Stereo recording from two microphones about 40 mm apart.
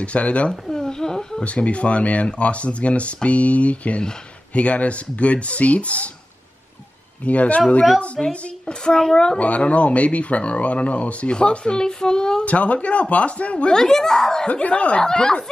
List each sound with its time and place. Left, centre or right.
0.0 s speech: left
0.5 s a sound: centre
1.4 s speech: left
7.2 s speech: left
8.2 s a woman's voice: left
9.4 s speech: left
12.4 s speech: left
13.7 s speech: centre
14.5 s speech: left
15.0 s speech: centre